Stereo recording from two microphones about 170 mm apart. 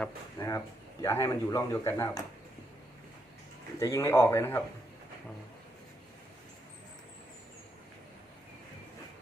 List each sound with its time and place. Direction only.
0.3 s speech: 15° left (ahead or behind)
3.8 s speech: 15° left (ahead or behind)